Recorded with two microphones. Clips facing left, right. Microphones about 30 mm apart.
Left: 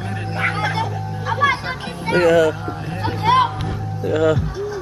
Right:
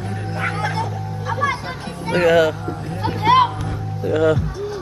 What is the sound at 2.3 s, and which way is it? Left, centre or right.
Speech, centre.